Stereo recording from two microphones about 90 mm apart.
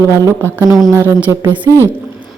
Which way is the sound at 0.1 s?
30° right (ahead or behind).